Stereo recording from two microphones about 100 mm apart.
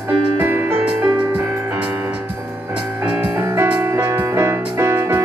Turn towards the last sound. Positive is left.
turn(degrees=-30)  # may be behind; listen again after turning